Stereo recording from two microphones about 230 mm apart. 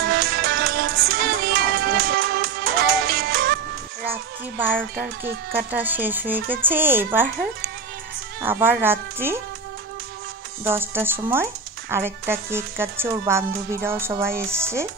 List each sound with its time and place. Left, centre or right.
0.0 s music: right
4.0 s music: centre
4.7 s a child's voice: centre
8.4 s speech: centre
10.6 s speech: centre